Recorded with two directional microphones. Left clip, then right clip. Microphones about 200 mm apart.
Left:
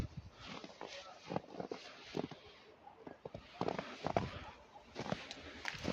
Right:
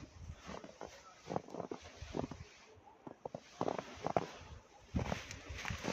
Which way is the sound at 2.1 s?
20° right (ahead or behind).